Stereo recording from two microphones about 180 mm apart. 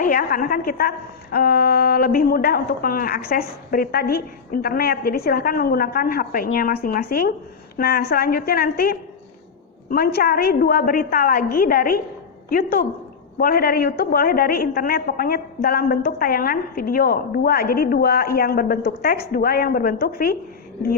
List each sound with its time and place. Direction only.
0.0 s a woman's voice: 50° left (ahead or behind)